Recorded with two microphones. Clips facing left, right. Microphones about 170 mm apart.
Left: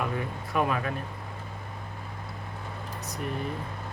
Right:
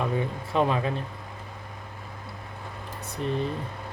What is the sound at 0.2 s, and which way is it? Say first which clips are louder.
Speech: right 3 dB; 25° right (ahead or behind).